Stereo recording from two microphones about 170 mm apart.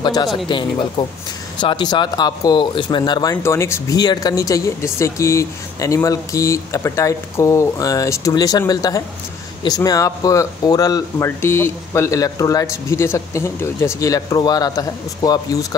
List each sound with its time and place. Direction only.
0.0 s speech: 25° left (ahead or behind)